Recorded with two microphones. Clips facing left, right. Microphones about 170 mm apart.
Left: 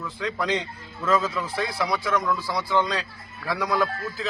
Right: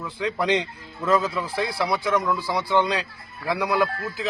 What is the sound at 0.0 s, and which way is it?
A man's voice, 15° right (ahead or behind).